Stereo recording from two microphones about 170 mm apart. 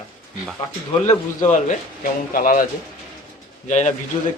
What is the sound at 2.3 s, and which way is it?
Speech, 55° left (ahead or behind).